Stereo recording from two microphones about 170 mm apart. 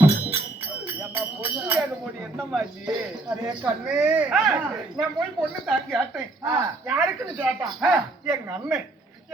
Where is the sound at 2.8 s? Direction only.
5° right (ahead or behind).